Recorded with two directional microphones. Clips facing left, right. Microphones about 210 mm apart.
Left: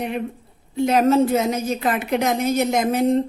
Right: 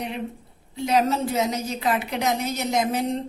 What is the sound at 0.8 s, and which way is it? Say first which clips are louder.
A woman's voice: left 6 dB; 55° left (ahead or behind).